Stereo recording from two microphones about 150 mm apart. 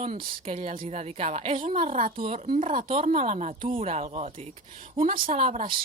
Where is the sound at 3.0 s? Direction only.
45° right (ahead or behind).